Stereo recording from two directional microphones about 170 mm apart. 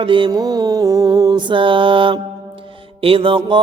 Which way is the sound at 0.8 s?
20° right (ahead or behind).